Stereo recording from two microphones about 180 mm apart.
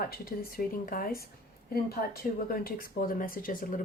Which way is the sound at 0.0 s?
55° left (ahead or behind).